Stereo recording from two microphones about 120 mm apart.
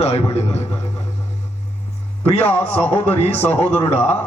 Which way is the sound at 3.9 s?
65° left (ahead or behind).